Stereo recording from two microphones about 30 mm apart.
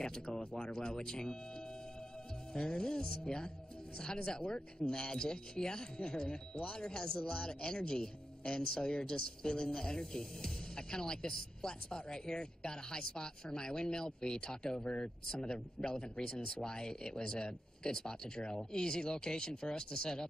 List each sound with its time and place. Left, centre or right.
0.0 s speech: left
2.5 s speech: left
14.8 s speech: left